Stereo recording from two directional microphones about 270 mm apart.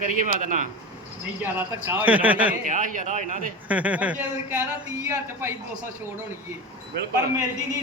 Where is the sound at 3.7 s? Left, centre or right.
Centre.